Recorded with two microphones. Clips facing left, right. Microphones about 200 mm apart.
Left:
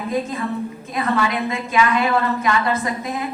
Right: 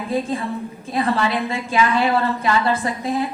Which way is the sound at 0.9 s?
30° right (ahead or behind).